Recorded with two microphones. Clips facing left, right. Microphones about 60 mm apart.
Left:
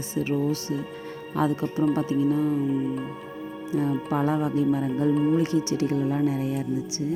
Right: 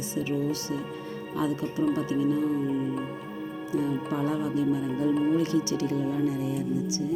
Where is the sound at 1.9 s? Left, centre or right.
Left.